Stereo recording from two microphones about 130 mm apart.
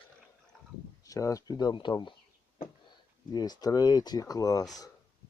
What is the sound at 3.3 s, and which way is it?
Speech, 30° left (ahead or behind).